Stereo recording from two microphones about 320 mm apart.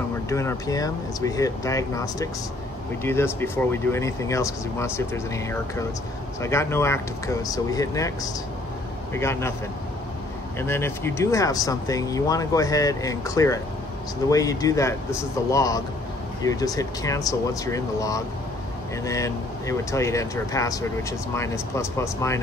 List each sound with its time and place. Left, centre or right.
0.3 s speech: centre
9.1 s speech: centre
10.6 s speech: centre